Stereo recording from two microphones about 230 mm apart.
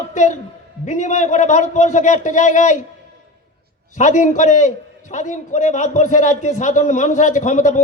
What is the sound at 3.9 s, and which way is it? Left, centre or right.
A man's voice, left.